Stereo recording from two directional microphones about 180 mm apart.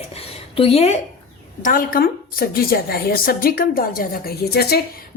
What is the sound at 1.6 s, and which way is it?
A woman's voice, 50° left (ahead or behind).